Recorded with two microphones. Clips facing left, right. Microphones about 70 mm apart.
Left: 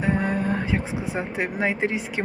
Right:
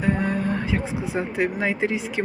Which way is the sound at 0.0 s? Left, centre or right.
Left.